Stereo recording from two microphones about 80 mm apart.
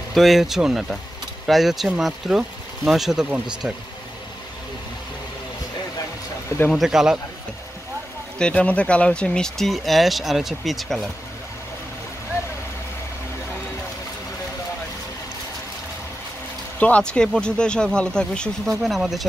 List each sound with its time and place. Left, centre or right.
0.1 s speech: centre
6.7 s speech: centre
8.4 s speech: centre
16.8 s speech: centre
18.7 s speech: centre